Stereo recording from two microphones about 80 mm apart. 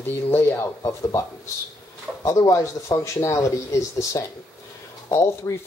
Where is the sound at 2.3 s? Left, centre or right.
Left.